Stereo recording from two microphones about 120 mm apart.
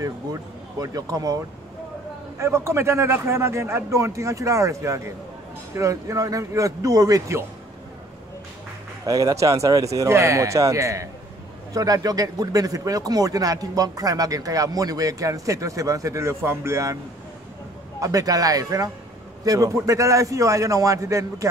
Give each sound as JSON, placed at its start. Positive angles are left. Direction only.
{"t": 0.0, "sound": "a man's voice", "side_deg": -30}
{"t": 9.0, "sound": "a man's voice", "side_deg": -30}
{"t": 18.0, "sound": "a man's voice", "side_deg": -30}